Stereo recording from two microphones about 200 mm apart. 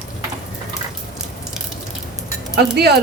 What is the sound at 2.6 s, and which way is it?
Speech, 55° right (ahead or behind).